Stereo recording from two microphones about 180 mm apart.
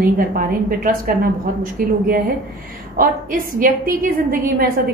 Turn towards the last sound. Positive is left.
turn(degrees=-50)  # may be behind; listen again after turning